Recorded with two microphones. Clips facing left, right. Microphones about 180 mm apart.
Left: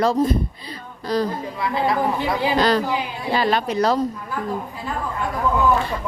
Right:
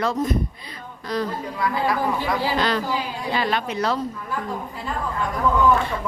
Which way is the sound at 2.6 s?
35° left (ahead or behind).